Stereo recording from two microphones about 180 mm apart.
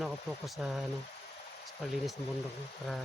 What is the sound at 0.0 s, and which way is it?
Speech, centre (ahead or behind).